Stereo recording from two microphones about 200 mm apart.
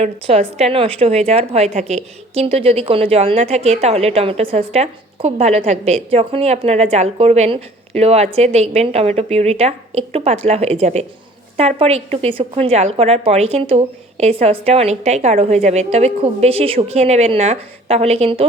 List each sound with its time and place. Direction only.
0.0 s a woman's voice: 30° right (ahead or behind)